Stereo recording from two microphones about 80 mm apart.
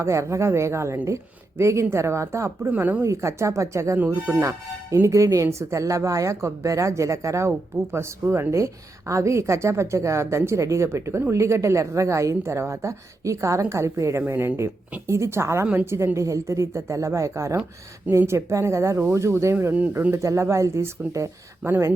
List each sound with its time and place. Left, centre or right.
0.0 s a woman's voice: right
2.6 s speech: centre
3.0 s a woman's voice: right
15.6 s speech: right
16.1 s a woman's voice: right
19.5 s a woman's voice: right